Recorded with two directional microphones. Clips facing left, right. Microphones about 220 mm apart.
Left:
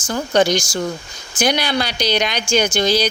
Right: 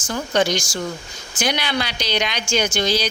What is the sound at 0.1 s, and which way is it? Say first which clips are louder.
Speech: left 4 dB; 40° left (ahead or behind).